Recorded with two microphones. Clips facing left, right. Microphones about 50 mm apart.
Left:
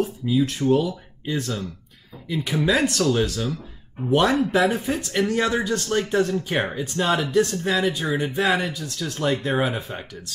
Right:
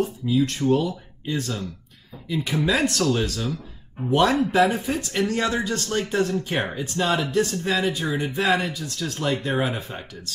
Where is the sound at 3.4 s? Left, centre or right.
Centre.